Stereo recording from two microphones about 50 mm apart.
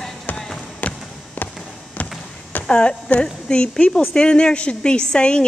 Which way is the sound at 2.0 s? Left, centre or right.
Left.